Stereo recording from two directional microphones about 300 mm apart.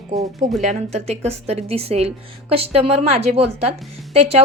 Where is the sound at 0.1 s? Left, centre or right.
Right.